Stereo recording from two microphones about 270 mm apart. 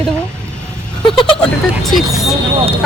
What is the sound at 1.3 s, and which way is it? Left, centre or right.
A woman's voice, centre.